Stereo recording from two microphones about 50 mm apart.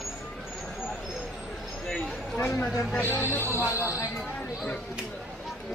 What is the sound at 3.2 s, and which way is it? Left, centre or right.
Music, left.